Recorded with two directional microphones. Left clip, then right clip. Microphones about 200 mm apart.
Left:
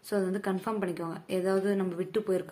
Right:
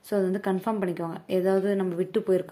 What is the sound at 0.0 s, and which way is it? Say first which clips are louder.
A woman's voice: right 4 dB; 20° right (ahead or behind).